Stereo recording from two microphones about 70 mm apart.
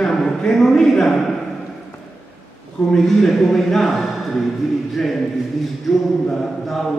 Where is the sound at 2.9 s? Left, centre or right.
Centre.